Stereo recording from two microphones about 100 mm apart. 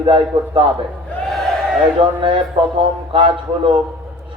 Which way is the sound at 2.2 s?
60° right (ahead or behind).